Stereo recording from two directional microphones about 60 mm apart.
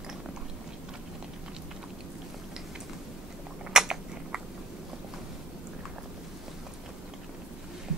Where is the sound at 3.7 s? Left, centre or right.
Centre.